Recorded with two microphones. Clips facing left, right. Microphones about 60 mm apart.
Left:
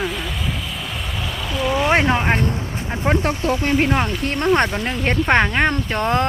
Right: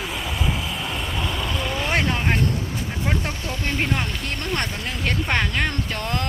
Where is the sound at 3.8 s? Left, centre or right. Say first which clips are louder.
Left 6 dB; left.